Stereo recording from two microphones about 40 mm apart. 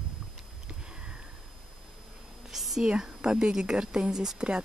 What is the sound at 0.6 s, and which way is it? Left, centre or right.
Sniff, right.